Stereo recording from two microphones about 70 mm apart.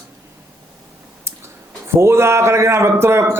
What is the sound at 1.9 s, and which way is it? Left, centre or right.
A man's voice, right.